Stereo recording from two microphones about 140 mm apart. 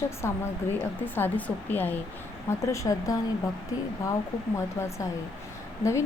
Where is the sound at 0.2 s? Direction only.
20° left (ahead or behind).